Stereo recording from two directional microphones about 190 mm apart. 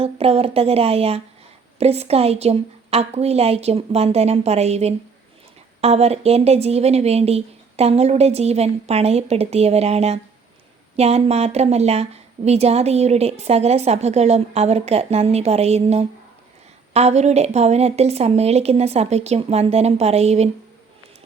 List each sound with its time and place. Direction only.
0.0 s a woman's voice: 30° right (ahead or behind)